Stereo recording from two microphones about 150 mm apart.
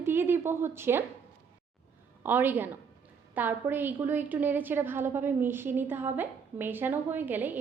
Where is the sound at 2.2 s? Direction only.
10° right (ahead or behind).